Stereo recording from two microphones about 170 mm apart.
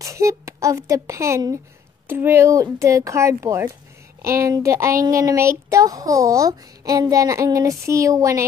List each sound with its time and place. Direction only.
0.0 s a woman's voice: 20° right (ahead or behind)